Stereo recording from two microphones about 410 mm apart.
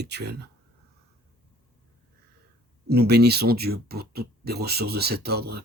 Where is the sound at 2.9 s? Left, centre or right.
Right.